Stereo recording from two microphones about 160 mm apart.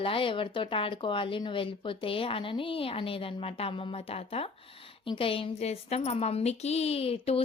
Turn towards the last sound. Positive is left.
turn(degrees=35)  # may be behind; listen again after turning